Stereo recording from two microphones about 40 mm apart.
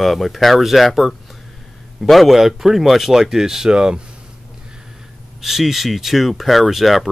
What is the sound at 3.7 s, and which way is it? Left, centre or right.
Speech, right.